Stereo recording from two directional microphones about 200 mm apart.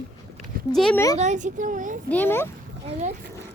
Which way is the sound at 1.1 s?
35° right (ahead or behind).